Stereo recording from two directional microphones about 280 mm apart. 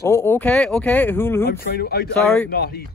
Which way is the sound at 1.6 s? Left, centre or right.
Left.